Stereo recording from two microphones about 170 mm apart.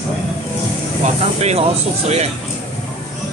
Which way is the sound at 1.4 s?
40° right (ahead or behind).